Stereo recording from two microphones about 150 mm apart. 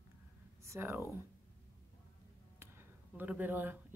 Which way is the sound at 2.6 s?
15° right (ahead or behind).